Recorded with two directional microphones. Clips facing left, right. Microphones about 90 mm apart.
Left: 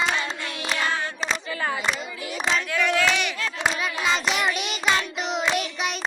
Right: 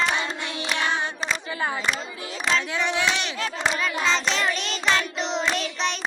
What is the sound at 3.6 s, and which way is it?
Child singing, 10° left (ahead or behind).